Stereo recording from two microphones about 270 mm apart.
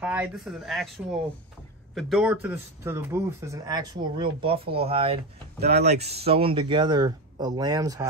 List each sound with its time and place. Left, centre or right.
0.0 s speech: centre
5.6 s speech: right
6.2 s speech: right